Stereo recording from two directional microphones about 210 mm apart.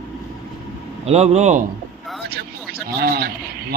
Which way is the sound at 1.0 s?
30° right (ahead or behind).